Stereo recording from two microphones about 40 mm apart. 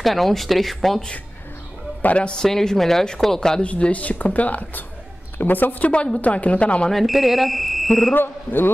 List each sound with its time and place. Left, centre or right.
0.0 s speech: centre
2.1 s a man's voice: left
2.4 s speech: centre
3.6 s a woman's voice: left
6.2 s speech: left
6.9 s speech: centre
8.1 s a man's voice: left